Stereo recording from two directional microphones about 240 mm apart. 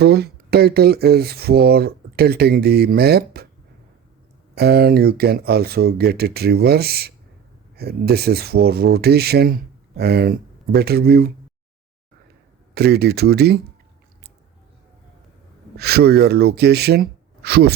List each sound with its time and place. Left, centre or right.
0.0 s speech: right
4.5 s speech: right
12.7 s speech: right
15.8 s speech: right